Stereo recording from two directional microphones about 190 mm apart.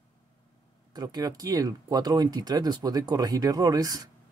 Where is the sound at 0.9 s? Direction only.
20° right (ahead or behind).